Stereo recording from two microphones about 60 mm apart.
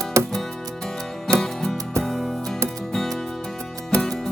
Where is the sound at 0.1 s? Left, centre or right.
Right.